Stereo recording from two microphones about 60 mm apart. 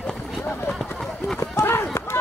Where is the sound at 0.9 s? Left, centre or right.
Centre.